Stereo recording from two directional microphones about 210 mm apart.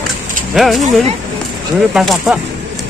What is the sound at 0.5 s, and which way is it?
Speech, centre (ahead or behind).